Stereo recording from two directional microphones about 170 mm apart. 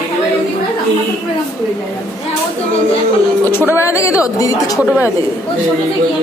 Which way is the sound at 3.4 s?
10° left (ahead or behind).